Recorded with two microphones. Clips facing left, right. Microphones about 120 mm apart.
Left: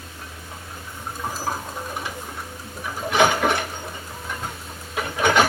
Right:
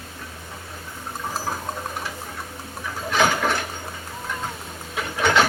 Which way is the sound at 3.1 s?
15° left (ahead or behind).